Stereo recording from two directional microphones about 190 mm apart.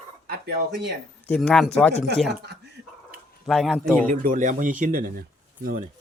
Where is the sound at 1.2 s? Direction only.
5° left (ahead or behind).